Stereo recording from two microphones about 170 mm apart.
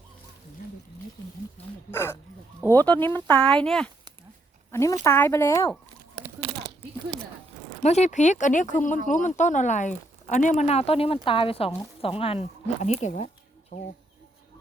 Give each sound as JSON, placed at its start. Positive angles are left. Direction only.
{"t": 1.9, "sound": "speech", "side_deg": 15}
{"t": 4.7, "sound": "speech", "side_deg": 15}
{"t": 7.8, "sound": "speech", "side_deg": 40}